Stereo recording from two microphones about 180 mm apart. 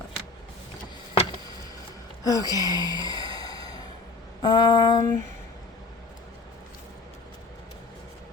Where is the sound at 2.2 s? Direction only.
20° left (ahead or behind).